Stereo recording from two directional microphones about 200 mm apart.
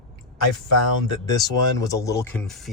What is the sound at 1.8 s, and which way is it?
Speech, 15° left (ahead or behind).